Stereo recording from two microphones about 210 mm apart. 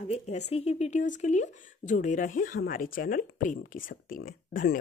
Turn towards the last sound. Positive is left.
turn(degrees=40)  # may be behind; listen again after turning